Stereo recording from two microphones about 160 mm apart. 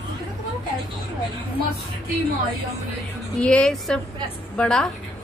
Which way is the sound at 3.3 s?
5° left (ahead or behind).